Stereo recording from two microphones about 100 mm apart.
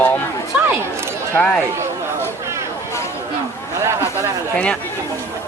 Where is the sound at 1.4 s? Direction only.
10° left (ahead or behind).